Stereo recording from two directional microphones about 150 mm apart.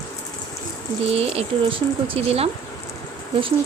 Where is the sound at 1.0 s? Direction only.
40° right (ahead or behind).